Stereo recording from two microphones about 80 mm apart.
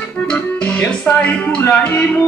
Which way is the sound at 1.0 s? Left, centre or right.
Centre.